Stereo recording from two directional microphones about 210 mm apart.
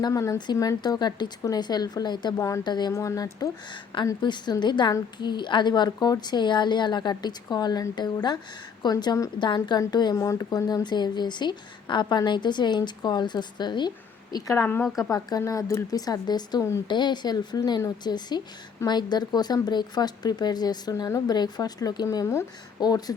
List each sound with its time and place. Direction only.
0.0 s speech: 15° left (ahead or behind)
15.1 s speech: 15° left (ahead or behind)